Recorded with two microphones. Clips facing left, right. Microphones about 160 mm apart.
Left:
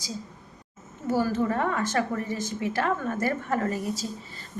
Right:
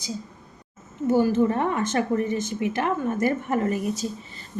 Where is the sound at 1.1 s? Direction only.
20° right (ahead or behind).